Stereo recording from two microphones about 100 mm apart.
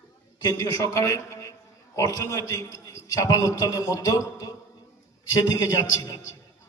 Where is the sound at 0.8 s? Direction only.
35° left (ahead or behind).